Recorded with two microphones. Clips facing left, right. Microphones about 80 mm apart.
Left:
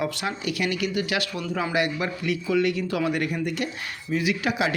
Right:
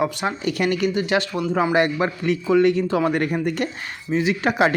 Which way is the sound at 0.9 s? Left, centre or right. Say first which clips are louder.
Right 5 dB; right.